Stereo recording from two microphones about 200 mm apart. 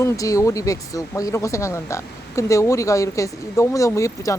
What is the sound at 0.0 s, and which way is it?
Speech, 15° left (ahead or behind).